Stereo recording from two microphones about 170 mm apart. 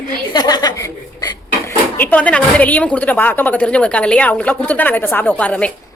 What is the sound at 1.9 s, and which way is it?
A woman's voice, 10° left (ahead or behind).